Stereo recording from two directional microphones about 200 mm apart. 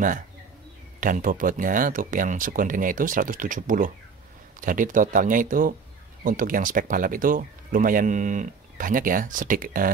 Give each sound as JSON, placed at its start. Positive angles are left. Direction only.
{"t": 1.0, "sound": "speech", "side_deg": -40}